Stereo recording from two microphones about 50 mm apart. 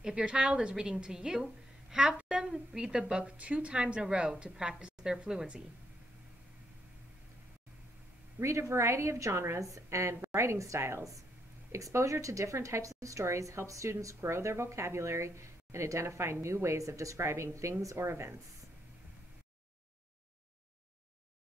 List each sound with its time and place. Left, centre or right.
0.0 s a woman's voice: centre
8.4 s a woman's voice: right
11.7 s a woman's voice: right